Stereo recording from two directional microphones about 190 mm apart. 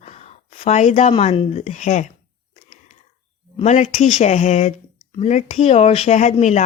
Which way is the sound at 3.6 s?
40° left (ahead or behind).